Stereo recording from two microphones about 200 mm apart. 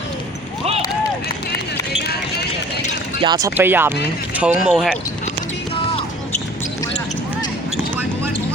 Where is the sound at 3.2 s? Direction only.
20° right (ahead or behind); by 4.9 s 5° right (ahead or behind).